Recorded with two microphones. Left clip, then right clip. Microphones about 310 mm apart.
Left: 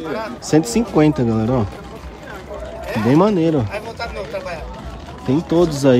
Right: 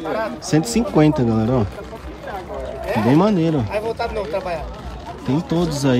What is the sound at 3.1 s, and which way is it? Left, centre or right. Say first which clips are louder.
Speech: left 4 dB; centre.